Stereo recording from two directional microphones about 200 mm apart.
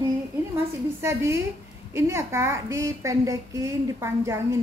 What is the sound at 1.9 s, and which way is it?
A woman's voice, 15° right (ahead or behind).